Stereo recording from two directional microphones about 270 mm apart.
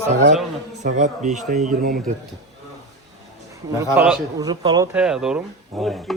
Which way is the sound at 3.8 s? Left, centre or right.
Centre.